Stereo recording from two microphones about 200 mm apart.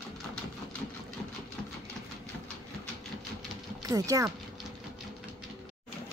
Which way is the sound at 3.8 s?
15° right (ahead or behind).